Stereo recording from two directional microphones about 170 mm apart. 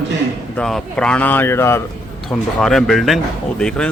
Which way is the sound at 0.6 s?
5° left (ahead or behind).